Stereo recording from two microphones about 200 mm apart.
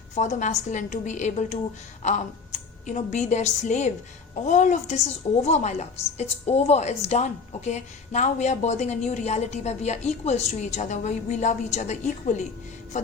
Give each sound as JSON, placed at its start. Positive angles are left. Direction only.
{"t": 0.1, "sound": "a woman's voice", "side_deg": 35}